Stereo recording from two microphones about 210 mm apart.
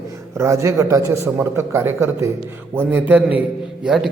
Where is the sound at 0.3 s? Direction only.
15° right (ahead or behind).